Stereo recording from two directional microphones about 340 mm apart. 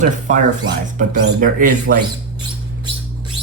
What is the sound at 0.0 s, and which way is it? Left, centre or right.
Speech, right.